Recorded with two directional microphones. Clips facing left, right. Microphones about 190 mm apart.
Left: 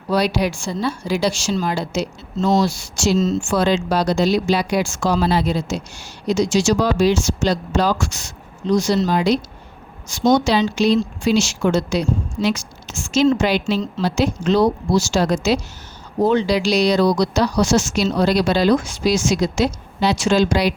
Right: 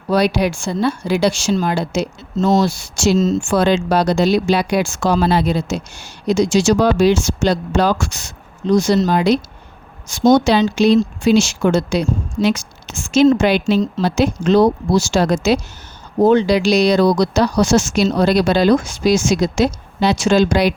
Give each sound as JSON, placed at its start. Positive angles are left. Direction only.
{"t": 0.1, "sound": "a woman's voice", "side_deg": -55}